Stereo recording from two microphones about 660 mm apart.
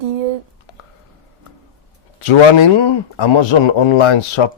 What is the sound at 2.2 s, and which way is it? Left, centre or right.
Speech, left.